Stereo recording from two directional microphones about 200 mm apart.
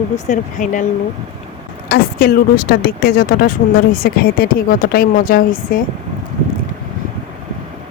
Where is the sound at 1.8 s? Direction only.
50° left (ahead or behind).